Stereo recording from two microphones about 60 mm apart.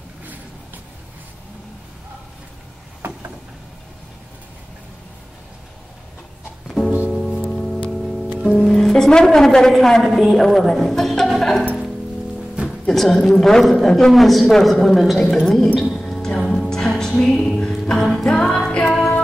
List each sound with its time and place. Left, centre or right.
7.1 s music: centre
7.5 s music: centre
8.4 s a woman's voice: centre
12.6 s a woman's voice: centre
15.8 s music: centre